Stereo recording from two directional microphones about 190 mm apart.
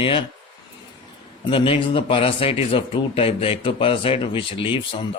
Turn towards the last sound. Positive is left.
turn(degrees=25)  # may be behind; listen again after turning